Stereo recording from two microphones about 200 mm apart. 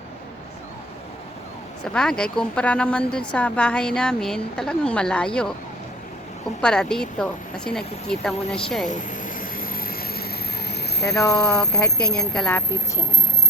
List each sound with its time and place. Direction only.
1.8 s a woman's voice: 5° left (ahead or behind)
6.6 s a woman's voice: 5° left (ahead or behind)
8.9 s vehicle: 40° left (ahead or behind)
11.0 s speech: 15° left (ahead or behind)
12.3 s a woman's voice: 5° left (ahead or behind)